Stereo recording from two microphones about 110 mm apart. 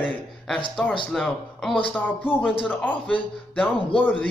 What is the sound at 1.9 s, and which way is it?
Speech, 15° left (ahead or behind).